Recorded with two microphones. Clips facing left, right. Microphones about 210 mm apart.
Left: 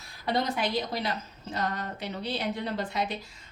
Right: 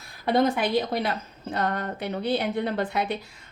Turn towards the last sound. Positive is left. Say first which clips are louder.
# right 4 dB
turn(degrees=-55)  # may be behind; listen again after turning